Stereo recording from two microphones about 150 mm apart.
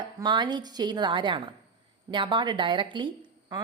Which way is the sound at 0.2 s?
30° right (ahead or behind).